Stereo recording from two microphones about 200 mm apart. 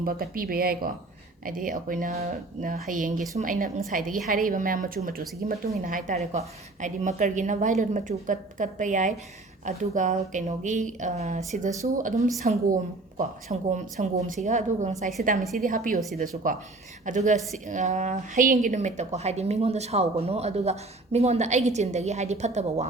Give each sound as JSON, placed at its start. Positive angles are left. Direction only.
{"t": 0.0, "sound": "a woman's voice", "side_deg": -45}